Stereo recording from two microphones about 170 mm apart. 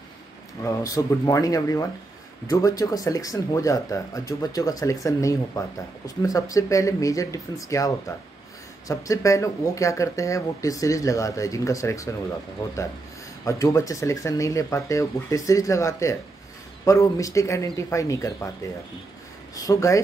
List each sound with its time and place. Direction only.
0.7 s speech: 20° left (ahead or behind)
13.5 s speech: 20° left (ahead or behind)
19.5 s speech: 20° left (ahead or behind)